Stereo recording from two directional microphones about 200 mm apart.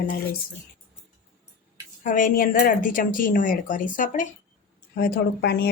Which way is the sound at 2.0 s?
40° left (ahead or behind).